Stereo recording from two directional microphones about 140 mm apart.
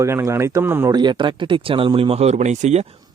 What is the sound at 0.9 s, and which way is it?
Speech, 30° right (ahead or behind).